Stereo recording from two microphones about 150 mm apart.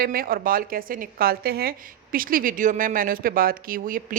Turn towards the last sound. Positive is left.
turn(degrees=-65)  # may be behind; listen again after turning